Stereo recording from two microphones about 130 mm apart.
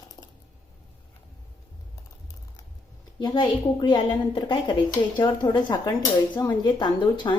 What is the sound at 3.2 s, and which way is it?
Speech, 35° left (ahead or behind).